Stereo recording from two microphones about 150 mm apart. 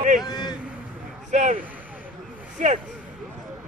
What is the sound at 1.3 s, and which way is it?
Speech, 50° right (ahead or behind).